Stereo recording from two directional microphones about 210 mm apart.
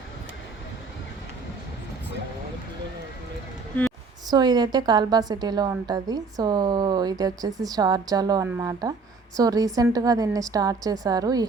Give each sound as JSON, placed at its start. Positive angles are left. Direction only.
{"t": 4.3, "sound": "a woman's voice", "side_deg": -20}